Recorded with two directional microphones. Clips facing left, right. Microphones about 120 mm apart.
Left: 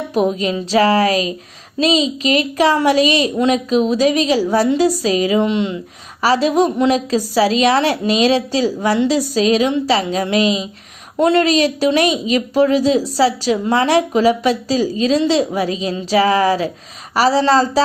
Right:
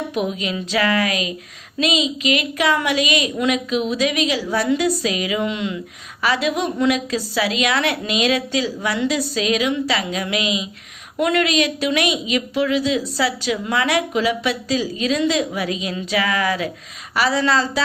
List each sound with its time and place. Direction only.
0.1 s a woman's voice: 40° left (ahead or behind)